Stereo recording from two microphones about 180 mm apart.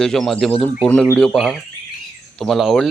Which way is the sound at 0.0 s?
5° left (ahead or behind).